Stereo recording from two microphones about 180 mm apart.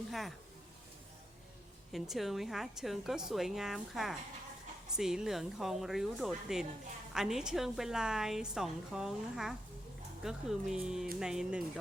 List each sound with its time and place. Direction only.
0.1 s speech: centre (ahead or behind)
1.9 s a woman's voice: centre (ahead or behind)